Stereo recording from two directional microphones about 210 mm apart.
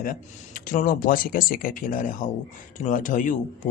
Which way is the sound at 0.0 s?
40° left (ahead or behind).